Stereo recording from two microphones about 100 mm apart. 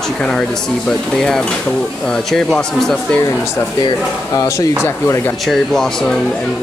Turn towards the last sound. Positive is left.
turn(degrees=5)  # may be behind; listen again after turning